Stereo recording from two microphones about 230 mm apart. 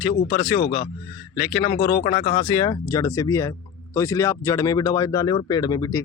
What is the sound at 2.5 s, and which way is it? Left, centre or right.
Speech, centre.